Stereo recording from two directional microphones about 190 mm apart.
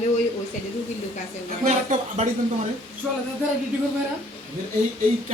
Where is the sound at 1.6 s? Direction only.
40° right (ahead or behind).